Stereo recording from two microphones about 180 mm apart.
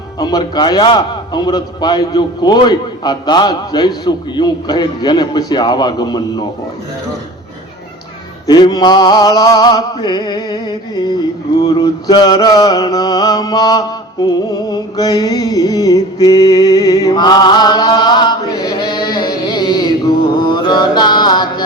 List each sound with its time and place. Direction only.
0.2 s a man's voice: 20° left (ahead or behind)
8.4 s a man's voice: 20° left (ahead or behind)
11.6 s mantra: 20° left (ahead or behind)